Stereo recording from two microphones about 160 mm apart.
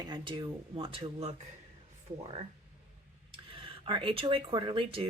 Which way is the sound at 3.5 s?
35° right (ahead or behind).